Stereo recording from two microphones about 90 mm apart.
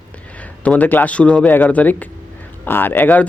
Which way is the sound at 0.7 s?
20° left (ahead or behind).